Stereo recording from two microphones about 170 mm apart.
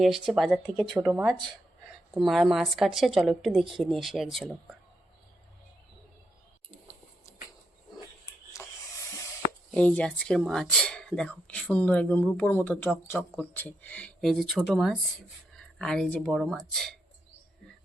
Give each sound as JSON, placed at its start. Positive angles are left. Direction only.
{"t": 0.0, "sound": "a woman's voice", "side_deg": 0}
{"t": 8.5, "sound": "a sound", "side_deg": 20}
{"t": 9.7, "sound": "a woman's voice", "side_deg": 10}